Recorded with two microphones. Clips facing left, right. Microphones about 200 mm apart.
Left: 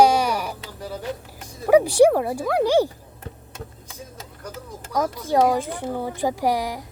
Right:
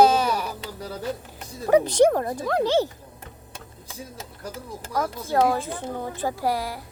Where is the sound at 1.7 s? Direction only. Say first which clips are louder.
Left 3 dB; 10° left (ahead or behind).